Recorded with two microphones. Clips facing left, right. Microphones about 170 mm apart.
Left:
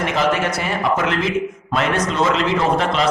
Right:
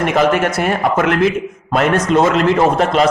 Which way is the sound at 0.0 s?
50° right (ahead or behind).